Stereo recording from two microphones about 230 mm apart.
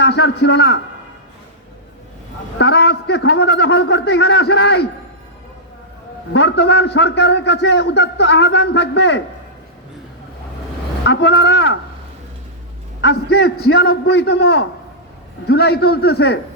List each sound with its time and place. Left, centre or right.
0.0 s a man's voice: left
2.6 s a man's voice: left
6.3 s a man's voice: left
11.0 s a man's voice: left
13.0 s a man's voice: left